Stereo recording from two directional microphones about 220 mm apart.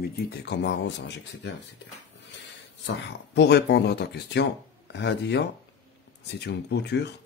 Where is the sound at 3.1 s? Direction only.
50° left (ahead or behind).